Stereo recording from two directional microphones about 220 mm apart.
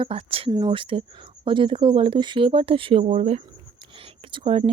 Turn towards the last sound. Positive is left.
turn(degrees=-25)  # may be behind; listen again after turning